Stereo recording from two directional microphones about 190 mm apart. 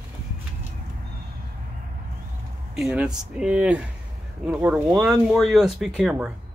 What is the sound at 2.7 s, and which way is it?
Speech, 5° right (ahead or behind).